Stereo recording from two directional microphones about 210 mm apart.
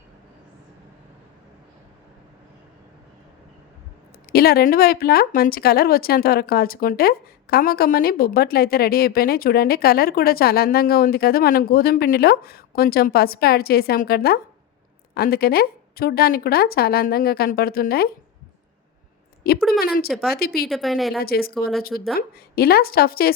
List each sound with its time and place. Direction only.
4.3 s speech: 45° left (ahead or behind)
19.4 s a woman's voice: 45° left (ahead or behind)
20.7 s speech: centre (ahead or behind)
21.2 s speech: 45° left (ahead or behind)